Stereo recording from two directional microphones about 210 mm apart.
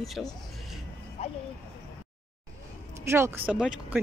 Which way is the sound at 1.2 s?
30° left (ahead or behind).